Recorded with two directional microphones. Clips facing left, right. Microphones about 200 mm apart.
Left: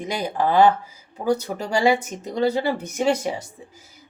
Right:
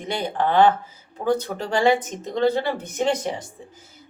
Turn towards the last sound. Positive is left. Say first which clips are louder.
# left 1 dB
turn(degrees=10)  # may be behind; listen again after turning